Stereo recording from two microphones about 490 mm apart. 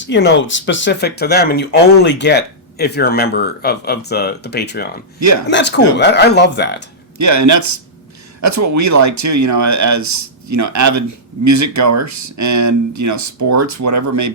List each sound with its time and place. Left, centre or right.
0.1 s speech: left
7.2 s speech: right